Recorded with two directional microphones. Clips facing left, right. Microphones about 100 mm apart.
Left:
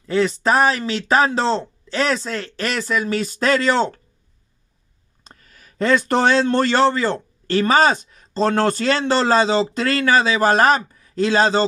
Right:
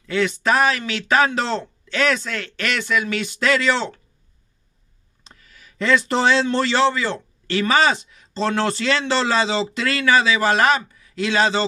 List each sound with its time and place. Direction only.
0.0 s speech: 35° left (ahead or behind)
5.2 s speech: 45° left (ahead or behind)